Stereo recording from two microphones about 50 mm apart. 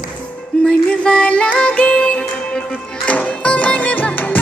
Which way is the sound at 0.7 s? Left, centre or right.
Centre.